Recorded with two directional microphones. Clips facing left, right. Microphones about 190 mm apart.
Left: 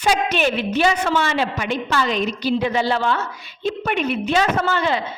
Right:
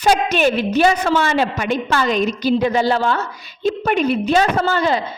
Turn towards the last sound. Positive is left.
turn(degrees=-40)  # may be behind; listen again after turning